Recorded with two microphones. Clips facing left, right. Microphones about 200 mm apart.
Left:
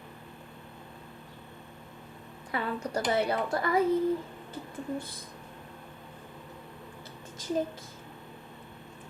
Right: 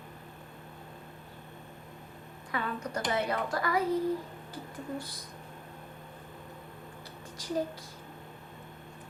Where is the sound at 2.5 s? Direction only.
30° left (ahead or behind).